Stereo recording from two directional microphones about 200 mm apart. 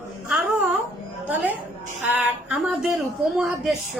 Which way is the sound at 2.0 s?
5° right (ahead or behind).